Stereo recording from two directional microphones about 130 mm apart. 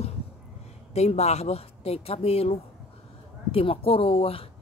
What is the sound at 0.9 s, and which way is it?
A woman's voice, 55° left (ahead or behind).